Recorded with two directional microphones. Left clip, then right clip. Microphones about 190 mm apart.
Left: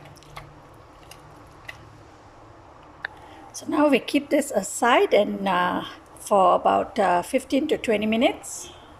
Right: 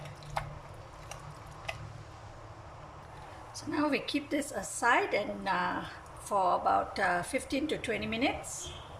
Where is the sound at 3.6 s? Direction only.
40° left (ahead or behind).